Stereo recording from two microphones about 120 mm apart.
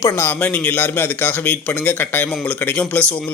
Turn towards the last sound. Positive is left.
turn(degrees=10)  # may be behind; listen again after turning